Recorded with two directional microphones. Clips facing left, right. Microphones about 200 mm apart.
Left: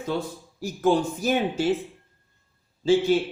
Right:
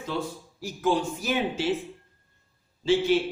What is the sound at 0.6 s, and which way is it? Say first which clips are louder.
A man's voice: left 4 dB; 45° left (ahead or behind).